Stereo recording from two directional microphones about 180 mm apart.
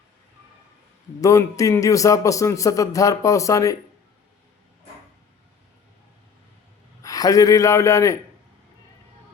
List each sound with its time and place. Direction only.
1.2 s a man's voice: 20° left (ahead or behind)
7.0 s a man's voice: 20° left (ahead or behind)